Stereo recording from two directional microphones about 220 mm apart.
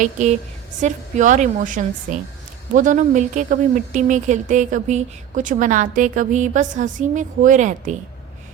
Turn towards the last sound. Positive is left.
turn(degrees=-35)  # may be behind; listen again after turning